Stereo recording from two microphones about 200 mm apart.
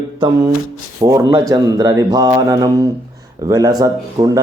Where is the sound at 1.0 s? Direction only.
20° right (ahead or behind).